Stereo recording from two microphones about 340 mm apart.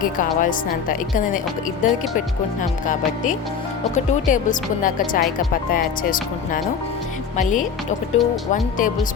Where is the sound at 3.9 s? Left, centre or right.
Left.